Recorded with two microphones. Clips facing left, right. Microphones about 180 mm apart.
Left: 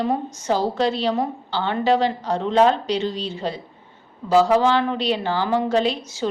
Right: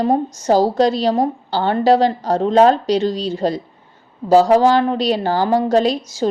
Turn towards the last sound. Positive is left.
turn(degrees=-40)  # may be behind; listen again after turning